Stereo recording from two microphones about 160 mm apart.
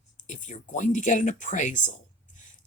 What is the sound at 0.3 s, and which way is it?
Speech, 50° left (ahead or behind).